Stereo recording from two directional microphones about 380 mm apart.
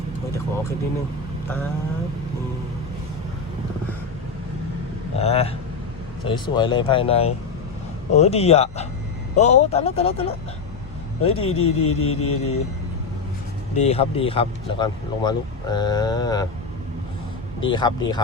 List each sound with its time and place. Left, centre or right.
5.1 s speech: centre
11.4 s a sound: left
13.7 s speech: centre
17.6 s speech: centre